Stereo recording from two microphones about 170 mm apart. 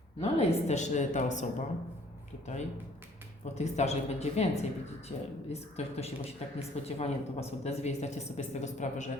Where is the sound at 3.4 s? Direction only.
40° left (ahead or behind).